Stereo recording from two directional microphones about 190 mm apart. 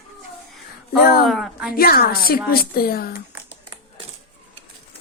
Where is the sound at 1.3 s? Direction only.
Centre (ahead or behind).